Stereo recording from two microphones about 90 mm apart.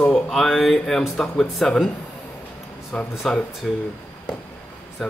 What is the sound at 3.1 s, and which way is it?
Speech, centre (ahead or behind).